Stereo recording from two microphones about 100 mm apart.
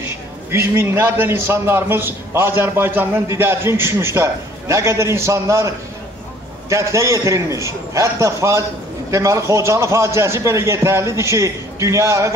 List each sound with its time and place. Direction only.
0.0 s a man's voice: 25° right (ahead or behind)
6.7 s a man's voice: 30° right (ahead or behind)